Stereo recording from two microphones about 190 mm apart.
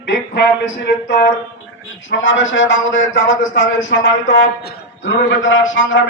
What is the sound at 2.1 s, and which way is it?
A man's voice, 80° left.